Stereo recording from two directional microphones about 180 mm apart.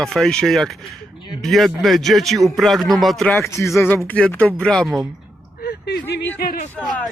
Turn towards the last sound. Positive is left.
turn(degrees=5)  # may be behind; listen again after turning